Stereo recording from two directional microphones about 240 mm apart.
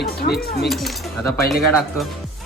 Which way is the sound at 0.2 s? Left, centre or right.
Left.